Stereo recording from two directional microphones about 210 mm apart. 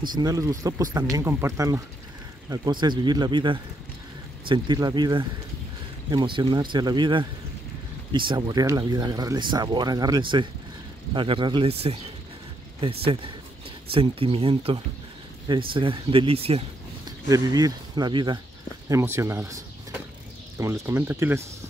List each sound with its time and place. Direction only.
0.1 s speech: 15° right (ahead or behind)
17.3 s speech: 15° right (ahead or behind)